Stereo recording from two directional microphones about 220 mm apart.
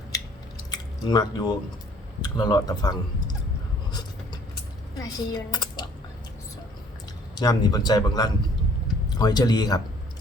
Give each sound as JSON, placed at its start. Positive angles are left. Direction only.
{"t": 0.7, "sound": "drip", "side_deg": 20}
{"t": 2.2, "sound": "speech", "side_deg": 20}
{"t": 4.9, "sound": "speech", "side_deg": 15}
{"t": 7.3, "sound": "a man's voice", "side_deg": 15}